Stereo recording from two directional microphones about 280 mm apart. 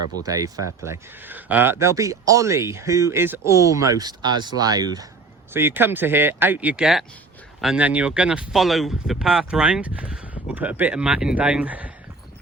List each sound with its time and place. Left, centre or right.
0.2 s speech: centre